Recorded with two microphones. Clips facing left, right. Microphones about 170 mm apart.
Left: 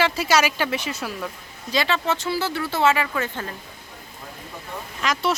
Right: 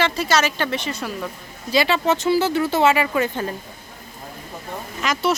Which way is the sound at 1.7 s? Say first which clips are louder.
Right 4 dB; 10° right (ahead or behind).